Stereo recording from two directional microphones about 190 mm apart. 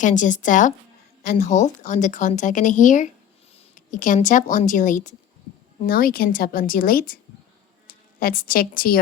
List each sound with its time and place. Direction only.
0.0 s a woman's voice: 40° left (ahead or behind)
8.2 s a woman's voice: 50° left (ahead or behind)